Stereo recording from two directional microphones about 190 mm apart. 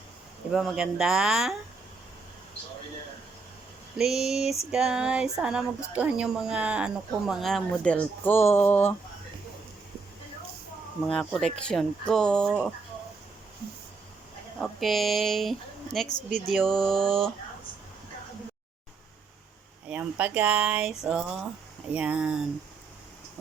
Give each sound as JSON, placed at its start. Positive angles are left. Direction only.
{"t": 0.5, "sound": "speech", "side_deg": 0}
{"t": 3.9, "sound": "speech", "side_deg": 0}
{"t": 11.1, "sound": "speech", "side_deg": 5}
{"t": 14.6, "sound": "speech", "side_deg": 0}
{"t": 16.0, "sound": "speech", "side_deg": 40}
{"t": 16.5, "sound": "speech", "side_deg": 0}
{"t": 19.9, "sound": "speech", "side_deg": -10}